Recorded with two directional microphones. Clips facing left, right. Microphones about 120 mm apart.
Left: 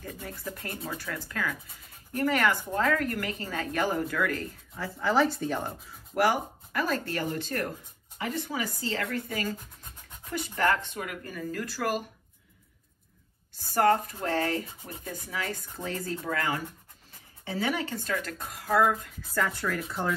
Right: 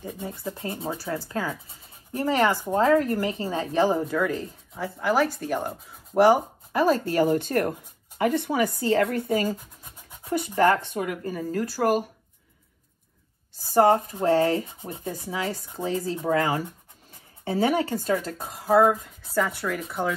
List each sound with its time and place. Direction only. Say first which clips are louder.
0.0 s speech: right 5 dB; 20° right (ahead or behind); by 5.8 s 5° right (ahead or behind)
6.1 s speech: right 8 dB; 25° right (ahead or behind)
7.2 s a woman's voice: right 9 dB; 55° right (ahead or behind)
11.0 s speech: right 7 dB; 30° right (ahead or behind)
11.7 s a woman's voice: right 8 dB; 40° right (ahead or behind)
13.7 s speech: right 5 dB; 25° right (ahead or behind)
16.3 s a woman's voice: right 8 dB; 35° right (ahead or behind)
18.8 s speech: right 5 dB; centre (ahead or behind)